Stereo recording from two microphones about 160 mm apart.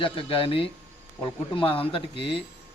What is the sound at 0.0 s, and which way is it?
Speech, 35° left (ahead or behind).